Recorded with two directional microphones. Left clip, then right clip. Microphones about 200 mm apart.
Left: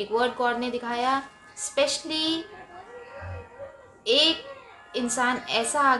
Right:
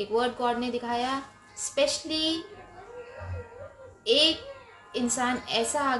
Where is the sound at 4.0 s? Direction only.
5° left (ahead or behind).